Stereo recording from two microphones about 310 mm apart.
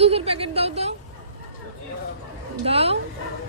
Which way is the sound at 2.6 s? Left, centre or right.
Centre.